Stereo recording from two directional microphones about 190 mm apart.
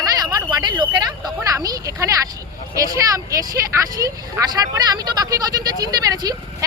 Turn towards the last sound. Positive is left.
turn(degrees=-20)  # may be behind; listen again after turning